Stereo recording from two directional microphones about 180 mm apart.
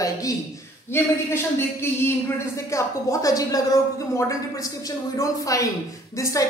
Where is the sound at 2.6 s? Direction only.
15° left (ahead or behind).